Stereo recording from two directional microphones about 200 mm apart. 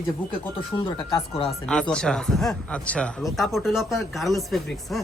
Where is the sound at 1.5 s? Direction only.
5° left (ahead or behind).